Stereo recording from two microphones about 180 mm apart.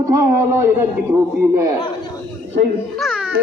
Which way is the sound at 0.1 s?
15° right (ahead or behind).